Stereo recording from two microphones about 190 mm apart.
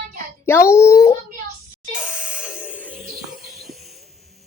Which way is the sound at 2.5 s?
10° right (ahead or behind).